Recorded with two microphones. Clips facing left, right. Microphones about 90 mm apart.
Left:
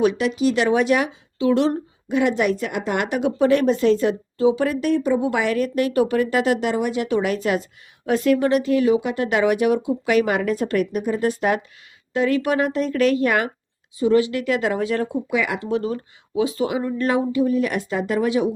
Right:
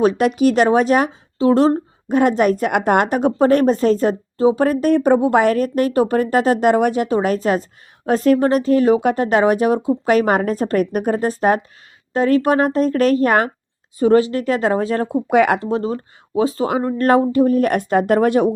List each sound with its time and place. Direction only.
0.0 s speech: 40° right (ahead or behind)
0.3 s speech: 55° right (ahead or behind)
4.9 s speech: 60° right (ahead or behind)
5.2 s speech: 45° right (ahead or behind)
10.9 s speech: 50° right (ahead or behind)
11.2 s speech: 35° right (ahead or behind)
14.3 s speech: 35° right (ahead or behind)
15.3 s speech: 60° right (ahead or behind)
15.5 s speech: 35° right (ahead or behind); by 18.5 s 50° right (ahead or behind)